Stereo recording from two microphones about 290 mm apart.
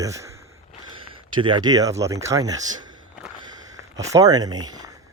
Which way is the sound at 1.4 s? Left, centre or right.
Centre.